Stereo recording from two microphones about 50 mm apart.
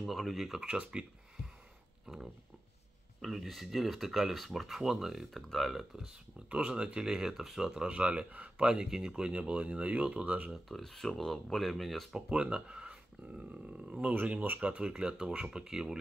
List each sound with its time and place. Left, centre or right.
0.0 s speech: centre
0.6 s speech: centre
3.2 s speech: centre
6.5 s speech: centre
10.7 s speech: centre
12.3 s speech: right
14.8 s speech: centre